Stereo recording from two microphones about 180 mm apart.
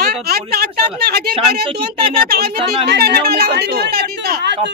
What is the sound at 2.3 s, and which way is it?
Speech, 60° right (ahead or behind).